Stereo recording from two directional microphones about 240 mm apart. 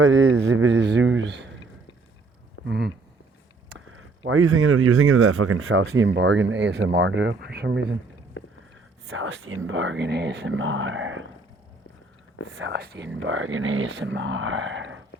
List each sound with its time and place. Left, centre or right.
0.0 s speech: right
2.6 s speech: right
3.7 s a sound: right
4.3 s speech: right
8.4 s a sound: left
9.0 s speech: right
12.5 s speech: right
13.1 s speech: right